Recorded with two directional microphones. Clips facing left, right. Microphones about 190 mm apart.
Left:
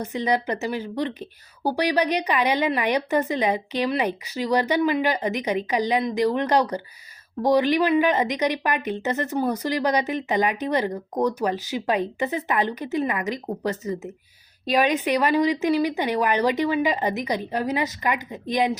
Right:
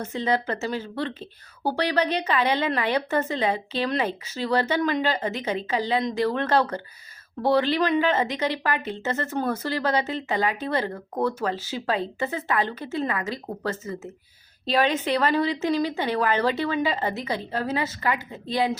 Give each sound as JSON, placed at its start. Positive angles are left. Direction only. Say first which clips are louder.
{"t": 0.0, "sound": "speech", "louder": "left 1 dB", "side_deg": 15}